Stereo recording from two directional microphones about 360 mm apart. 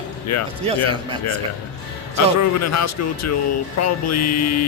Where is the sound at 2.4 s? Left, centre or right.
Left.